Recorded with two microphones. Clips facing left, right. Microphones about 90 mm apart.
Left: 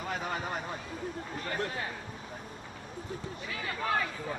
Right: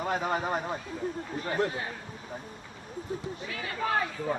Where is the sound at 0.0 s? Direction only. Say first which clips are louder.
Right 6 dB; 40° right (ahead or behind).